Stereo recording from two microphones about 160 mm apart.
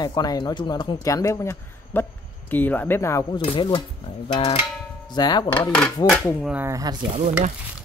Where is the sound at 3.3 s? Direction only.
30° left (ahead or behind).